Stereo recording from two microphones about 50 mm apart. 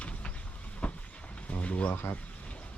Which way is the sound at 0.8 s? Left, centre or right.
Left.